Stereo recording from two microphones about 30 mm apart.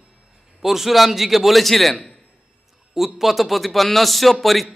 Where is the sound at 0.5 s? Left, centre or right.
Centre.